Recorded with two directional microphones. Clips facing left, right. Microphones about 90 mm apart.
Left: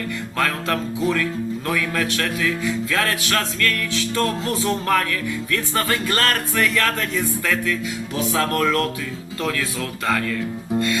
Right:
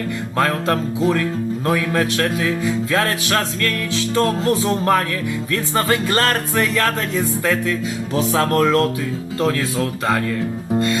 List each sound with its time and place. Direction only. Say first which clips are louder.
0.3 s music: right 4 dB; 30° right (ahead or behind)
9.4 s speech: right 5 dB; 35° right (ahead or behind)